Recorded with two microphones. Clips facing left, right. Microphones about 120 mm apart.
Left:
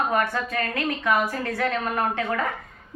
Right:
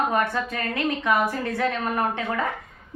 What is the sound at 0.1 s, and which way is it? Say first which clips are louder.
A woman's voice: even; 20° right (ahead or behind).